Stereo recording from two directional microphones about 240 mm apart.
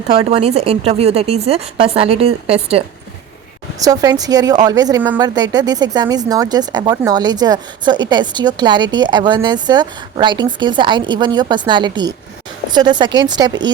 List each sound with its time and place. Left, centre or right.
0.2 s speech: right